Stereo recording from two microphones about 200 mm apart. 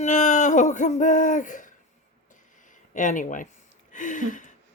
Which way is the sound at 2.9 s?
40° left (ahead or behind).